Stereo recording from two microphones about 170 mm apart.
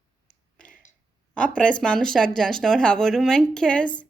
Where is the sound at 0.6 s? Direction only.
10° left (ahead or behind).